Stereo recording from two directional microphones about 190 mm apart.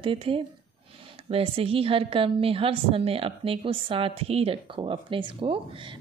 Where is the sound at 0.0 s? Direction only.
30° right (ahead or behind).